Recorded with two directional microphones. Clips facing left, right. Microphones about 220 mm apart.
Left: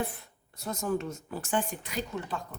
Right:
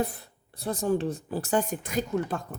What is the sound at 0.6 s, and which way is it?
Speech, 30° right (ahead or behind).